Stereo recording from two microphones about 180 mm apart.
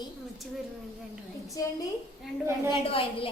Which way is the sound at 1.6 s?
20° left (ahead or behind).